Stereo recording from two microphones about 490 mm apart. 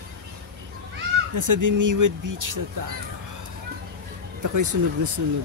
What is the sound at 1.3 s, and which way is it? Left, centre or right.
Speech, right.